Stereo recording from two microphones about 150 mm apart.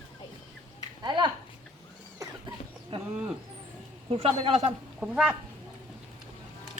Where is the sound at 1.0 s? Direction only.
30° right (ahead or behind).